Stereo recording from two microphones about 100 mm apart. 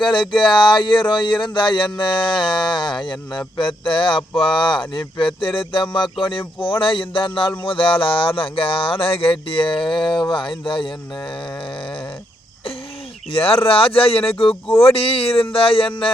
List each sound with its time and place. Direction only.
0.0 s speech: 50° left (ahead or behind)
13.3 s speech: 65° left (ahead or behind)